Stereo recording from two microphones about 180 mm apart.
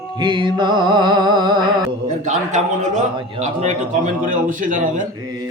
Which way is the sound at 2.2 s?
40° right (ahead or behind).